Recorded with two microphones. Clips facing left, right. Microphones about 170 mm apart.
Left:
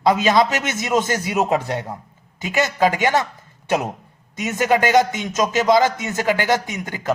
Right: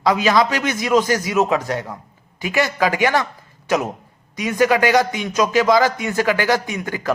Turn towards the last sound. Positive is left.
turn(degrees=20)  # may be behind; listen again after turning